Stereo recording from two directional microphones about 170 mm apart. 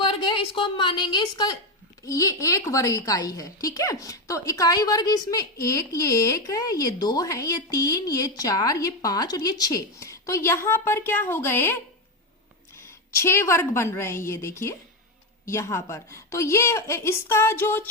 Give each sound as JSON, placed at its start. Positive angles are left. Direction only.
{"t": 0.0, "sound": "a woman's voice", "side_deg": 30}